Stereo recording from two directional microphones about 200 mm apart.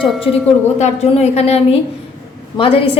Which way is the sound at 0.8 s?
35° left (ahead or behind).